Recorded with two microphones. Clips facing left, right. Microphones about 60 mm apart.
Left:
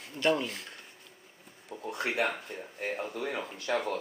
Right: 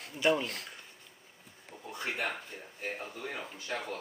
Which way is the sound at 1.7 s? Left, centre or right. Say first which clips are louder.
Left 7 dB; left.